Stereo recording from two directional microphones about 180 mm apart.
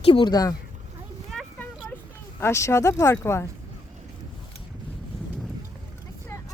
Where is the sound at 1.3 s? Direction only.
Centre (ahead or behind).